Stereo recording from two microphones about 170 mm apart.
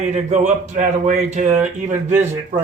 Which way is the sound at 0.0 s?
45° right (ahead or behind).